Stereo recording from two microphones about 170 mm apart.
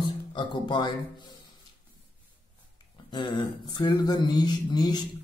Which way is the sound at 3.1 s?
25° left (ahead or behind).